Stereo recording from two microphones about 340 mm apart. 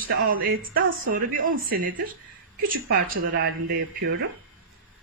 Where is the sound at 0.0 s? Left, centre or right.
Right.